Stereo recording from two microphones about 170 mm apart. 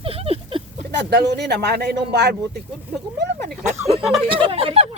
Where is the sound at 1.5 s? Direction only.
75° right (ahead or behind).